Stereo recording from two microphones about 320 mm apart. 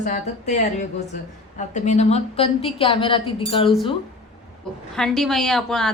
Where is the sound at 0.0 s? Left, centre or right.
Left.